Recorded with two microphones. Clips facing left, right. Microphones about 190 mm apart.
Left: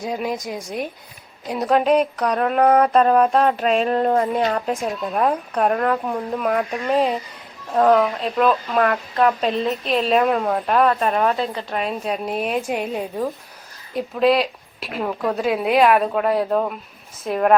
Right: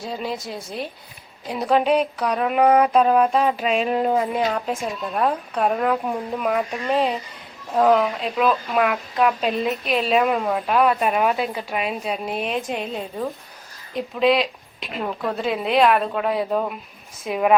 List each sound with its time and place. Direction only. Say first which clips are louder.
0.0 s a woman's voice: left 3 dB; 15° left (ahead or behind)
1.5 s speech: left 2 dB; centre (ahead or behind)